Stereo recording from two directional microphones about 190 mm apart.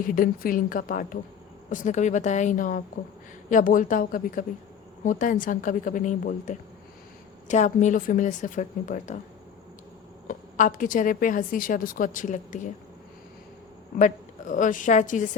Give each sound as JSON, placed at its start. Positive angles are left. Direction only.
{"t": 0.0, "sound": "a woman's voice", "side_deg": 45}
{"t": 10.2, "sound": "a woman's voice", "side_deg": 45}
{"t": 14.0, "sound": "a woman's voice", "side_deg": 40}